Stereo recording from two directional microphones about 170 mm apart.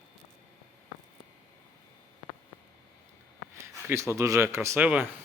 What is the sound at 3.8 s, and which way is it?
Speech, 15° right (ahead or behind).